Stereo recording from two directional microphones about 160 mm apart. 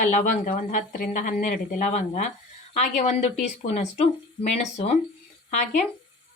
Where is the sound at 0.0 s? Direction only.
55° left (ahead or behind).